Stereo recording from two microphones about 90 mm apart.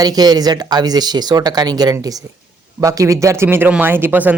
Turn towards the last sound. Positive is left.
turn(degrees=-20)  # may be behind; listen again after turning